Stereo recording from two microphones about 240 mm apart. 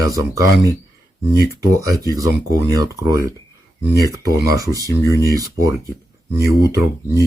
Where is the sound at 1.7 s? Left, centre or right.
Centre.